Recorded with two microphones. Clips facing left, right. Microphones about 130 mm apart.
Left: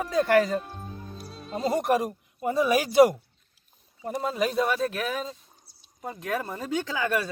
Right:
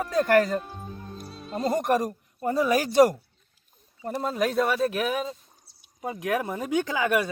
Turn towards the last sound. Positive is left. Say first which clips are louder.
# right 3 dB
turn(degrees=-15)  # may be behind; listen again after turning